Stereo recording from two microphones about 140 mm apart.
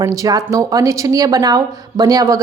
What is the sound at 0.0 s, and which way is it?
A woman's voice, 25° right (ahead or behind).